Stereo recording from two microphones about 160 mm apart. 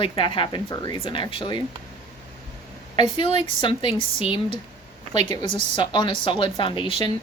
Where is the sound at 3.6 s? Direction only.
30° left (ahead or behind).